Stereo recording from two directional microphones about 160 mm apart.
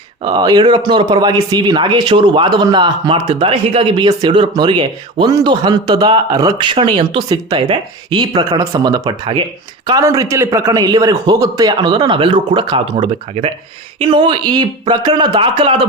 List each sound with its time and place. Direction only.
0.3 s speech: 25° right (ahead or behind)